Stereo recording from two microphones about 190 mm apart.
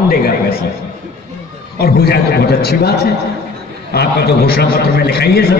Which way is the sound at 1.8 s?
55° left (ahead or behind).